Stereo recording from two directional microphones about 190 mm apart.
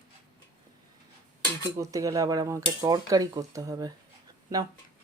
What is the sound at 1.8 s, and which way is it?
Speech, 15° right (ahead or behind).